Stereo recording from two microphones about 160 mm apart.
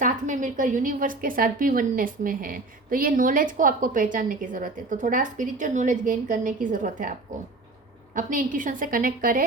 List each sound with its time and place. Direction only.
0.0 s a woman's voice: 50° right (ahead or behind)
8.1 s a woman's voice: 55° right (ahead or behind)